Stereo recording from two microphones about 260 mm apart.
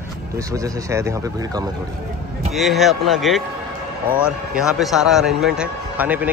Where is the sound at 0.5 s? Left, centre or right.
Centre.